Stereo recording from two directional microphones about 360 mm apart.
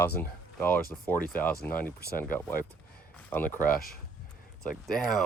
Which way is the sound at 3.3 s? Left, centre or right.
Centre.